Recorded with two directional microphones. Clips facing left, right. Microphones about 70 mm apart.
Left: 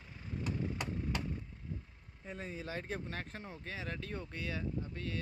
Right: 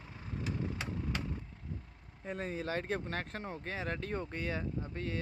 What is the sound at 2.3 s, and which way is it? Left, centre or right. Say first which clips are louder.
Speech: right 6 dB; right.